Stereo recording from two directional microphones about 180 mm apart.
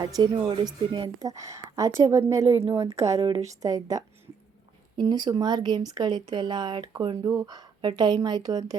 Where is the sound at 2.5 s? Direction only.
30° right (ahead or behind).